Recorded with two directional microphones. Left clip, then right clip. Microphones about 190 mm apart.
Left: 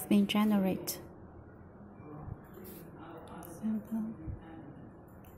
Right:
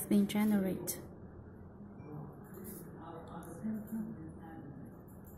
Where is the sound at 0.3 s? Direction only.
20° left (ahead or behind).